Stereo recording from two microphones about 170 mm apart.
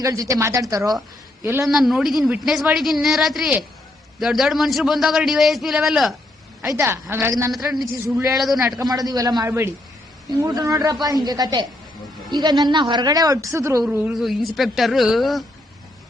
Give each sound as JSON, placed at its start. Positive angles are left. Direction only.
{"t": 0.0, "sound": "a woman's voice", "side_deg": -20}
{"t": 1.6, "sound": "a man's voice", "side_deg": 0}
{"t": 6.7, "sound": "a woman's voice", "side_deg": -15}
{"t": 7.5, "sound": "a man's voice", "side_deg": 0}
{"t": 8.8, "sound": "a woman's voice", "side_deg": -25}
{"t": 13.8, "sound": "a man's voice", "side_deg": -5}